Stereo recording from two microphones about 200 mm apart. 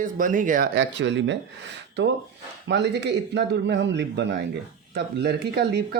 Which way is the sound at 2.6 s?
60° right (ahead or behind).